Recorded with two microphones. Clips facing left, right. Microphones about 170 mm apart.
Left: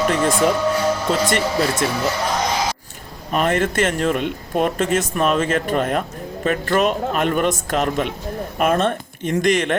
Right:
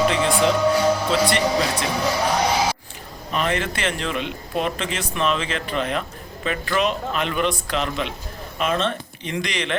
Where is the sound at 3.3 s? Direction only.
45° left (ahead or behind).